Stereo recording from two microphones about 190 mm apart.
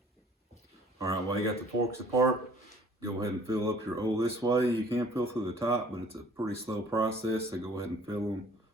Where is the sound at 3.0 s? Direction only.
15° right (ahead or behind).